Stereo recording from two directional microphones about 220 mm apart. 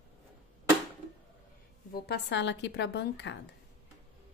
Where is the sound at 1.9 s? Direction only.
45° left (ahead or behind).